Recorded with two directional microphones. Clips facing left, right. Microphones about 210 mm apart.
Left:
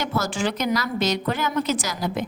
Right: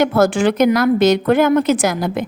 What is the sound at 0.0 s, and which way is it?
Speech, 55° right (ahead or behind).